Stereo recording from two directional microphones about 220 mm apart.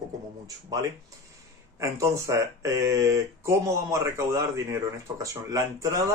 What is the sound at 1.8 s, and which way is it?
Speech, 15° right (ahead or behind).